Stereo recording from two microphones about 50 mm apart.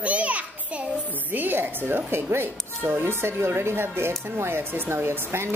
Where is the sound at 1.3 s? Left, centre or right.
Right.